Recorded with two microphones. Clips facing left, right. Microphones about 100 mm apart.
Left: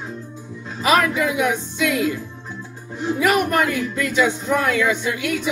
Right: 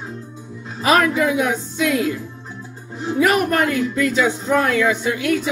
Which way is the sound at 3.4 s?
40° right (ahead or behind).